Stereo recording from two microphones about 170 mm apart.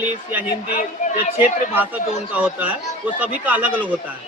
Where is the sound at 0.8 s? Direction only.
45° left (ahead or behind).